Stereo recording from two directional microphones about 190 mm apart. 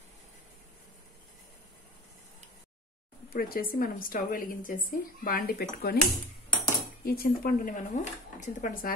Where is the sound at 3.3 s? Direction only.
50° left (ahead or behind).